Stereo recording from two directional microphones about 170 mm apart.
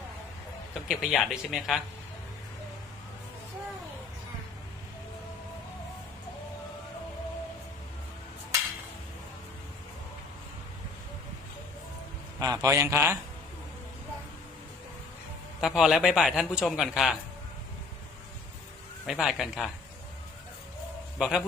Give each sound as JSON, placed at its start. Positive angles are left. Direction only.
{"t": 0.7, "sound": "a man's voice", "side_deg": 0}
{"t": 12.4, "sound": "a man's voice", "side_deg": -20}
{"t": 15.6, "sound": "a man's voice", "side_deg": 0}
{"t": 19.0, "sound": "a man's voice", "side_deg": 0}
{"t": 21.2, "sound": "a man's voice", "side_deg": 0}